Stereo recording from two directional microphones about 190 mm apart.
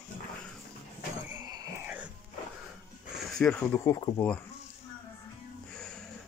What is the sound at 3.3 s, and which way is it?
Speech, 5° left (ahead or behind).